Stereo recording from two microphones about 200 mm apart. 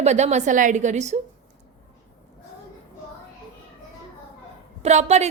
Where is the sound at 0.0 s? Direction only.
35° right (ahead or behind).